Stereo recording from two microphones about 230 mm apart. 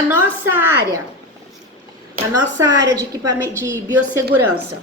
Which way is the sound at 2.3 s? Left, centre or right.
Centre.